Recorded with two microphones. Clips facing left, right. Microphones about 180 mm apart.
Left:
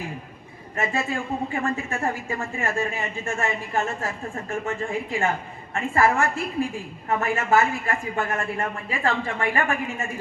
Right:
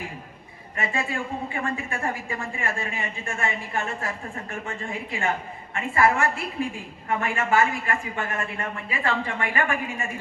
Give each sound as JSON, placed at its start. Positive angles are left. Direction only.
{"t": 0.8, "sound": "a man's voice", "side_deg": 40}